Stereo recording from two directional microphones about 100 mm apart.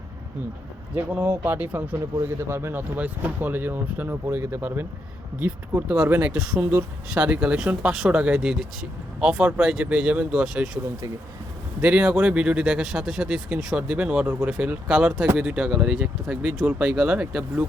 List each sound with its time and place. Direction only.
0.9 s speech: 20° right (ahead or behind)
11.8 s speech: 15° right (ahead or behind)